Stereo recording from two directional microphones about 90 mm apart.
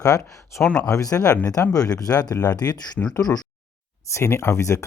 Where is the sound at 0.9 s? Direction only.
40° left (ahead or behind).